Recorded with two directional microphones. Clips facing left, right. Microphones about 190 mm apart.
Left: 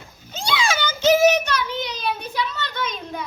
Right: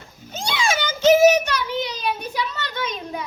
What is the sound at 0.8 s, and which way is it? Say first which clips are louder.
Child singing: right 3 dB; 20° right (ahead or behind).